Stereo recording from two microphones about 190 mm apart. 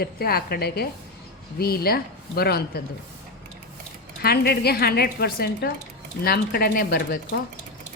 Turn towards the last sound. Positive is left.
turn(degrees=55)  # may be behind; listen again after turning